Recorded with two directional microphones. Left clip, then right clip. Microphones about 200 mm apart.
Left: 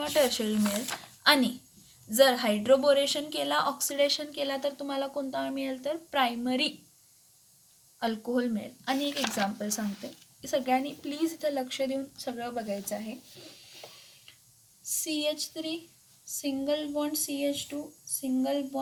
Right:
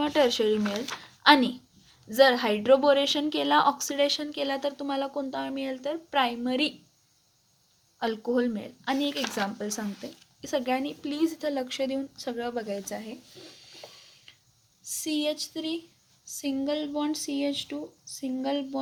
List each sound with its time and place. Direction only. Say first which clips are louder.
0.0 s a woman's voice: right 3 dB; 25° right (ahead or behind)
7.9 s a woman's voice: right 3 dB; 30° right (ahead or behind)
14.8 s a sound: right 1 dB; 50° right (ahead or behind)